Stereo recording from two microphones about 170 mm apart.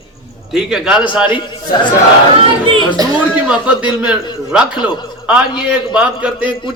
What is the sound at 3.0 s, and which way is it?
Speech, 20° right (ahead or behind).